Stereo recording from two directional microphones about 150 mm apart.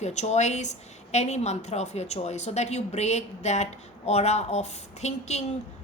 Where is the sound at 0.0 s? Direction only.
50° left (ahead or behind).